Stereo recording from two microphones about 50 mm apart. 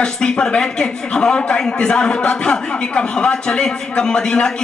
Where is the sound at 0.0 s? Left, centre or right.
Centre.